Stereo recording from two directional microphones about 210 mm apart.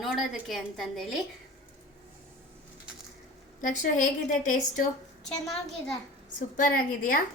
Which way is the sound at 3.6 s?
40° left (ahead or behind).